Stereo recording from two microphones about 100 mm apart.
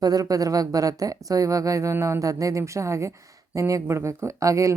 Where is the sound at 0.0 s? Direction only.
40° right (ahead or behind).